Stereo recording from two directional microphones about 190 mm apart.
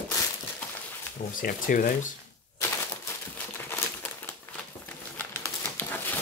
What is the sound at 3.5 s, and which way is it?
Crumpling, 10° left (ahead or behind).